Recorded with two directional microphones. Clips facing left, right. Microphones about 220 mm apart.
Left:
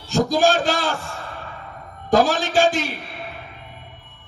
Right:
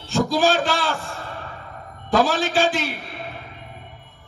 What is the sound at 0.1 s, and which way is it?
Speech, 45° left (ahead or behind).